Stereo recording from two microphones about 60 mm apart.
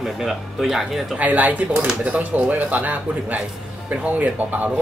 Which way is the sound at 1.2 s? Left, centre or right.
Right.